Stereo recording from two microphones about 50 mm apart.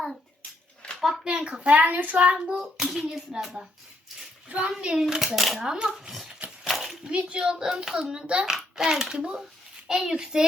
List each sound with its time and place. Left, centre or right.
0.9 s a sound: centre
1.2 s a child's voice: centre; by 2.1 s right
2.1 s hands: right
4.4 s a woman's voice: right
4.9 s a child's voice: centre
5.6 s hands: centre
6.7 s a sound: centre
7.0 s a child's voice: right
7.4 s hands: centre
8.3 s a child's voice: right
8.5 s hands: centre